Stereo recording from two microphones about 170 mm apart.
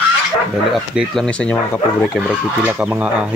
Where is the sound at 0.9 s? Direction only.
5° left (ahead or behind).